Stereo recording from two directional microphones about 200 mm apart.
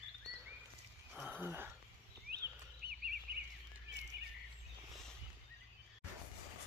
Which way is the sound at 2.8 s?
45° right (ahead or behind).